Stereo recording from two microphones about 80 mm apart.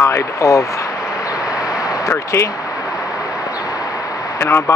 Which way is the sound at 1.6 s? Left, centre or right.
Left.